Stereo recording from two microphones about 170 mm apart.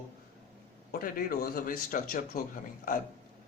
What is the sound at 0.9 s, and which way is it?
Speech, 55° left (ahead or behind).